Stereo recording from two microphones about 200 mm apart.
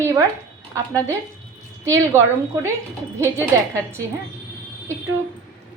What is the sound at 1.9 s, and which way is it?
Speech, 15° right (ahead or behind).